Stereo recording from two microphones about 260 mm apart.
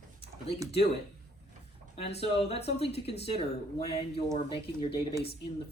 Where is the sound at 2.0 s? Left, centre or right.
Left.